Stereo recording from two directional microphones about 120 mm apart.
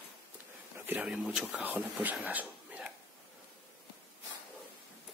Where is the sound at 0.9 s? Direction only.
10° right (ahead or behind).